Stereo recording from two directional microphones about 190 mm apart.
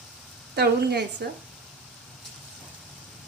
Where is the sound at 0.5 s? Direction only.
55° right (ahead or behind).